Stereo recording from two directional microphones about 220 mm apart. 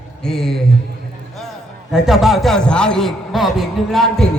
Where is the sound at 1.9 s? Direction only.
Centre (ahead or behind).